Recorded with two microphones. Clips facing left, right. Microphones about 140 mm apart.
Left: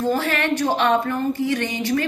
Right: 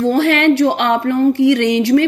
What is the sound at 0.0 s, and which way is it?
A woman's voice, 70° right (ahead or behind).